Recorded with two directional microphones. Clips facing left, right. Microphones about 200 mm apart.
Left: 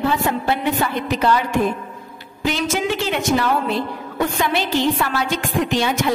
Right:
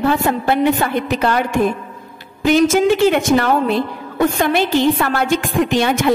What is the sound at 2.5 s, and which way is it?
A woman's voice, 50° right (ahead or behind).